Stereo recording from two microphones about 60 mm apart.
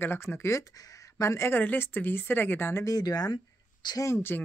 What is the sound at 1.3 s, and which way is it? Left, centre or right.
Speech, left.